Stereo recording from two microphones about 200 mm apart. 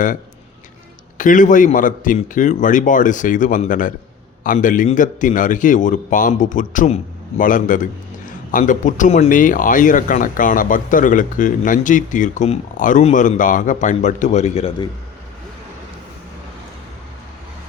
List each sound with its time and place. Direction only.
1.2 s speech: 40° left (ahead or behind)